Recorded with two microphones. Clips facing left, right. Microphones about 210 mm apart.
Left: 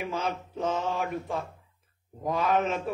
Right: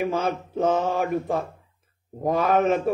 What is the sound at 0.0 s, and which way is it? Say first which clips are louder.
A man's voice: right 7 dB; 50° right (ahead or behind).